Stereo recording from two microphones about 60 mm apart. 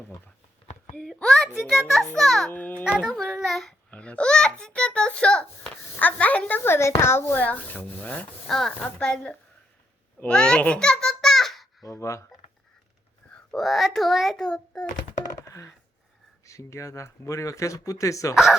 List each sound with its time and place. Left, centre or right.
1.0 s a child's voice: centre
2.5 s a woman's voice: left
3.0 s a child's voice: centre
3.9 s a child's voice: left
6.0 s a woman's voice: left
6.7 s speech: left
7.4 s a woman's voice: left
8.4 s a child's voice: centre
10.8 s a sound: centre
11.9 s speech: left
13.5 s a child's voice: centre
14.4 s a child's voice: centre
15.4 s coin: left
16.5 s speech: left